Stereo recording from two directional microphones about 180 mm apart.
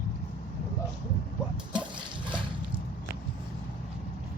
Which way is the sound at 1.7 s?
25° right (ahead or behind).